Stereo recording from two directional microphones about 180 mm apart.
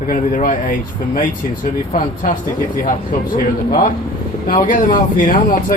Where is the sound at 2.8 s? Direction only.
45° left (ahead or behind).